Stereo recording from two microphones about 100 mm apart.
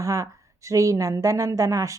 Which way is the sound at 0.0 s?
35° right (ahead or behind).